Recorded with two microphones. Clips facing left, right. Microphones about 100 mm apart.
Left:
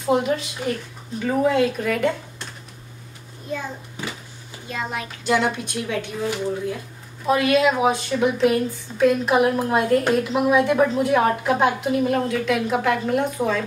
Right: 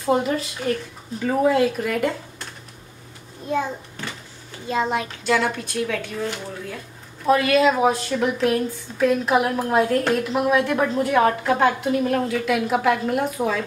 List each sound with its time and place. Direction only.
0.0 s a woman's voice: 5° left (ahead or behind)
4.6 s a child's voice: 25° right (ahead or behind)
5.2 s a woman's voice: 15° left (ahead or behind); by 13.6 s 5° right (ahead or behind)